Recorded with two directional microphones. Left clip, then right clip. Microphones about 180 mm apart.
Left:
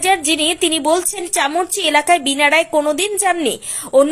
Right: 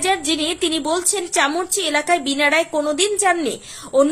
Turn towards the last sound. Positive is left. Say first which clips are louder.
# left 4 dB
turn(degrees=15)  # may be behind; listen again after turning